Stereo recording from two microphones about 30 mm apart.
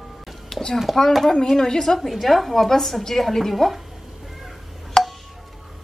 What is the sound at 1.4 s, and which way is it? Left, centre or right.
Speech, centre.